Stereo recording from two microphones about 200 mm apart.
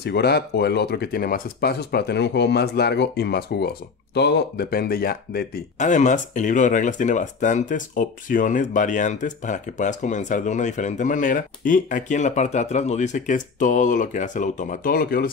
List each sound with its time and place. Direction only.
0.0 s speech: 55° left (ahead or behind)